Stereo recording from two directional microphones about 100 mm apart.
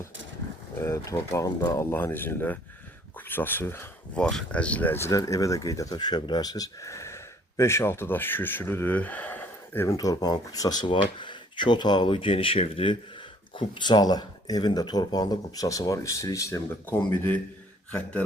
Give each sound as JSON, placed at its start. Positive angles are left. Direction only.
{"t": 0.8, "sound": "speech", "side_deg": 25}
{"t": 1.9, "sound": "speech", "side_deg": 20}
{"t": 4.1, "sound": "speech", "side_deg": 5}
{"t": 10.0, "sound": "speech", "side_deg": 40}
{"t": 13.6, "sound": "speech", "side_deg": 50}